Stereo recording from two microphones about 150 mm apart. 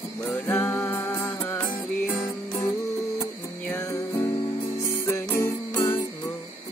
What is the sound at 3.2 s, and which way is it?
Music, 15° left (ahead or behind).